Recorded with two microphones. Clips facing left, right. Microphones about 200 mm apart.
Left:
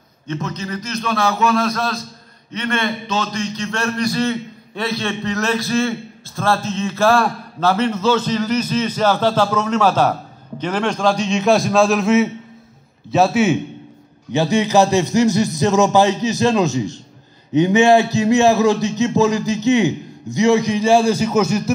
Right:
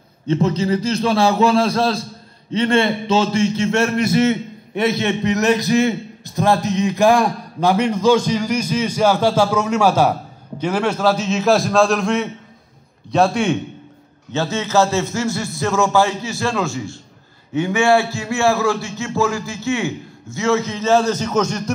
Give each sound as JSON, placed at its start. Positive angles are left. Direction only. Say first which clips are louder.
{"t": 0.3, "sound": "a man's voice", "louder": "right 8 dB", "side_deg": -30}
{"t": 14.3, "sound": "a man's voice", "louder": "left 3 dB", "side_deg": 15}